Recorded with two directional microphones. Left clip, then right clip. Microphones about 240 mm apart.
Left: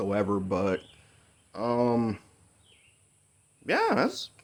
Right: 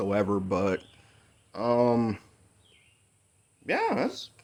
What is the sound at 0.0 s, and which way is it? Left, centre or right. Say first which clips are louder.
Speech: right 1 dB; centre.